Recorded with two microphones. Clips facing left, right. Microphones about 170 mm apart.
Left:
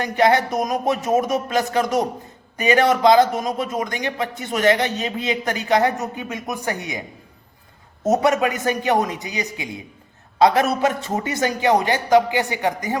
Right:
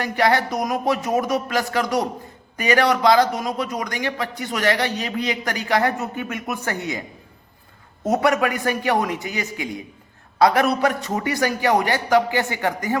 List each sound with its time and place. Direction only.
0.0 s speech: 20° left (ahead or behind)
8.0 s speech: 20° left (ahead or behind)